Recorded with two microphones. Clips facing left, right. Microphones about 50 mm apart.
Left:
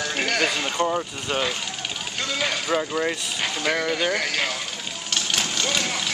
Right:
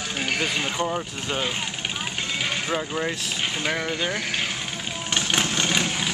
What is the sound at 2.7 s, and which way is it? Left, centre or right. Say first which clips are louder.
Speech: left 5 dB; centre.